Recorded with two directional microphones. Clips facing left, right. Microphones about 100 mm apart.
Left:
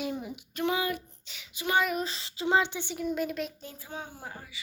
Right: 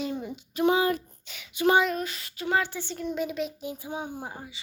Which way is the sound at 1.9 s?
25° left (ahead or behind).